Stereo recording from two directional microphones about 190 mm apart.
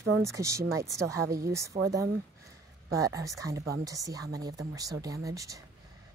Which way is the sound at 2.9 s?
15° right (ahead or behind).